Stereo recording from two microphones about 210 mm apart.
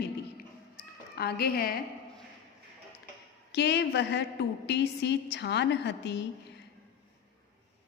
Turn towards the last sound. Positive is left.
turn(degrees=55)  # may be behind; listen again after turning